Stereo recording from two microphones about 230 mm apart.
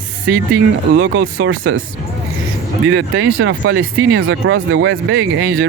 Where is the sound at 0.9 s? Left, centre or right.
Right.